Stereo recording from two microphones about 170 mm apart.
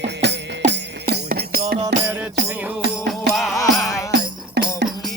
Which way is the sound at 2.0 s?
10° right (ahead or behind).